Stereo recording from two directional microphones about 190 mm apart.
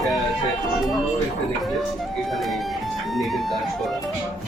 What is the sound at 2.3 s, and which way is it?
Speech, centre (ahead or behind).